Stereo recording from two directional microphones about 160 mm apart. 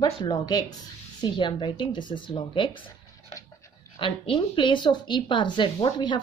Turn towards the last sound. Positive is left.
turn(degrees=30)  # may be behind; listen again after turning